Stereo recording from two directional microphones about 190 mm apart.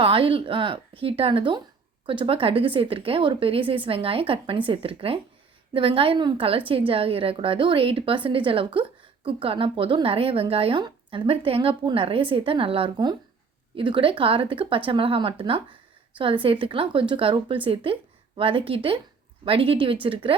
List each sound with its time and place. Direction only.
0.0 s a woman's voice: 30° right (ahead or behind)